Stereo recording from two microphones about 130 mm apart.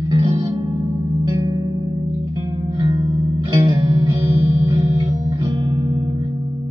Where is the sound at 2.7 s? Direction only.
30° right (ahead or behind).